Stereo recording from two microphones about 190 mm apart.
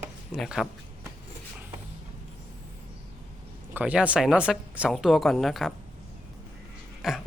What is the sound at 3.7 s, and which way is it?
Speech, 5° right (ahead or behind).